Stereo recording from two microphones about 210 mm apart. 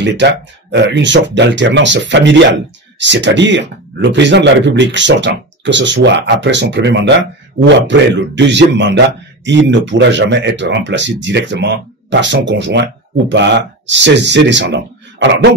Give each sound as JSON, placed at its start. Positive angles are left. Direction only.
{"t": 0.0, "sound": "speech", "side_deg": -55}